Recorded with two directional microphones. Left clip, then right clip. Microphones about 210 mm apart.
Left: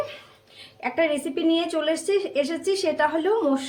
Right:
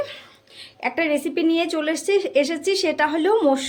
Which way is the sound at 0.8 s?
30° right (ahead or behind).